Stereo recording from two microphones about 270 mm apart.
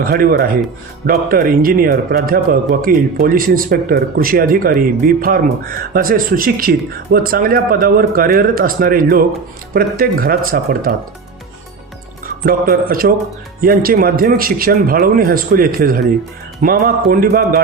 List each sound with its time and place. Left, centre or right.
0.0 s speech: right
12.5 s speech: right